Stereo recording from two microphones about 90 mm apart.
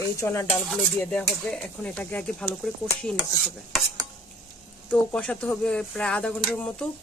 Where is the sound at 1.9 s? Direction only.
15° left (ahead or behind).